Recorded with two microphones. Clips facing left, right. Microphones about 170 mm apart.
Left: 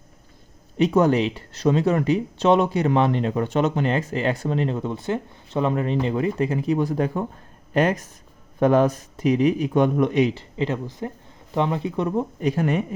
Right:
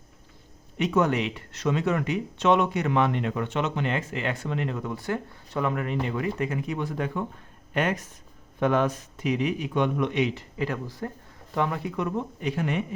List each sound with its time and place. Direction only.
0.8 s speech: 35° left (ahead or behind)
10.6 s speech: 20° left (ahead or behind); by 12.8 s 40° left (ahead or behind)